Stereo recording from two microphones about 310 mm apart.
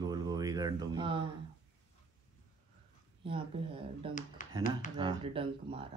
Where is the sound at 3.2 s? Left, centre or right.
Centre.